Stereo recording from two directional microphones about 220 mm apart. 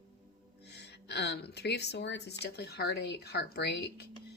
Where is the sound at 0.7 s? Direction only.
50° left (ahead or behind).